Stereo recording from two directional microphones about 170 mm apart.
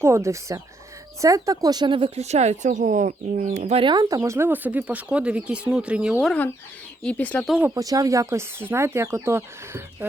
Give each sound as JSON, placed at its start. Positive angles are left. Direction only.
{"t": 0.0, "sound": "speech", "side_deg": -15}
{"t": 7.5, "sound": "speech", "side_deg": -15}